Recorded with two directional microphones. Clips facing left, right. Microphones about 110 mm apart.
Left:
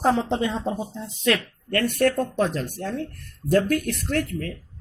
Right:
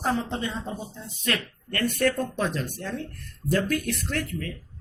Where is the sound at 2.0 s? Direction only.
55° left (ahead or behind).